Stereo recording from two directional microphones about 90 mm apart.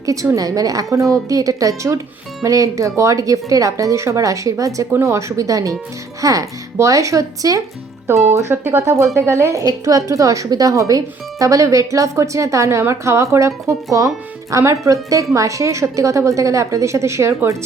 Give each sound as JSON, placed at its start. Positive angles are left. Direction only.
{"t": 0.0, "sound": "a woman's voice", "side_deg": -40}